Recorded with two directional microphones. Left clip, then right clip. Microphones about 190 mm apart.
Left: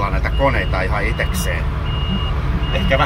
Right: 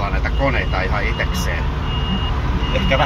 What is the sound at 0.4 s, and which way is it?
Speech, 15° left (ahead or behind).